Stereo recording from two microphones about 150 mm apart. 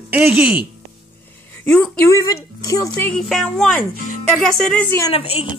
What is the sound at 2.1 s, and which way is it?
Speech, 20° left (ahead or behind).